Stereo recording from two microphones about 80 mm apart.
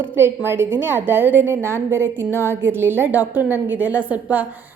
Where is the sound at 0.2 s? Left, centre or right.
Right.